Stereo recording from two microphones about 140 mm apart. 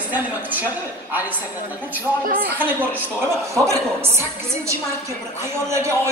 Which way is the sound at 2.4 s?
15° right (ahead or behind).